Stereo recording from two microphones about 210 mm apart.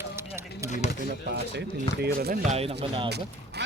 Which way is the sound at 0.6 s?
35° left (ahead or behind).